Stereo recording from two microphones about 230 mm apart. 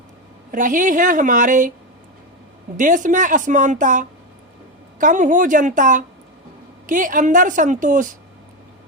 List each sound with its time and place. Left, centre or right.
0.5 s a woman's voice: right
2.7 s a woman's voice: right